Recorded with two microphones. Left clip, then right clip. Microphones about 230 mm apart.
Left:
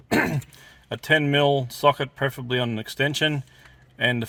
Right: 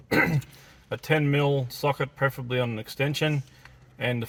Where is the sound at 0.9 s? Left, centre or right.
Left.